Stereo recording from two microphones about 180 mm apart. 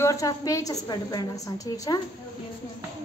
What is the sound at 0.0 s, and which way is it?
A woman's voice, 15° left (ahead or behind).